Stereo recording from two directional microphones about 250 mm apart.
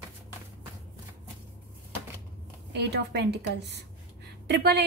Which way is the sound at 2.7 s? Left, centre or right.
Right.